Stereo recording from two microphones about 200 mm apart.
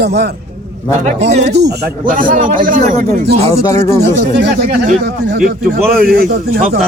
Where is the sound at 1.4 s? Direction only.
55° right (ahead or behind).